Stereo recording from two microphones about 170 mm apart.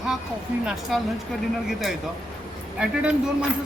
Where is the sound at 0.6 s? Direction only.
Centre (ahead or behind).